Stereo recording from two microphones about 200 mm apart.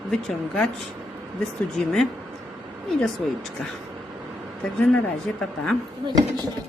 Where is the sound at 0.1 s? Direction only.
5° left (ahead or behind).